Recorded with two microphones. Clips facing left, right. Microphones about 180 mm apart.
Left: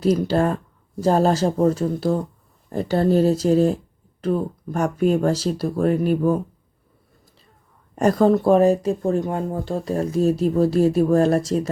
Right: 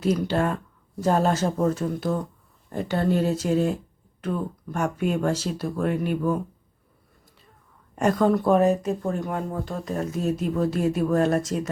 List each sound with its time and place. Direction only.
0.0 s speech: 35° left (ahead or behind)
7.9 s speech: 35° left (ahead or behind)